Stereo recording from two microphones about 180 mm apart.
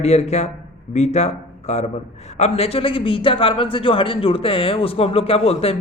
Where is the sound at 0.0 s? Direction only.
40° left (ahead or behind).